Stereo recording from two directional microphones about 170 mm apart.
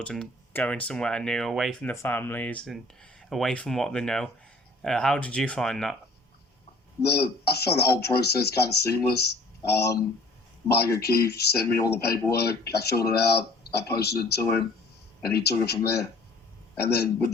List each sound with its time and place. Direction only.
0.0 s speech: 5° left (ahead or behind)
1.9 s speech: 10° left (ahead or behind)
7.0 s speech: 70° left (ahead or behind)